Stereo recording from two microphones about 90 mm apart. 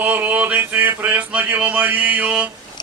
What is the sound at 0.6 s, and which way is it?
Mantra, 20° right (ahead or behind).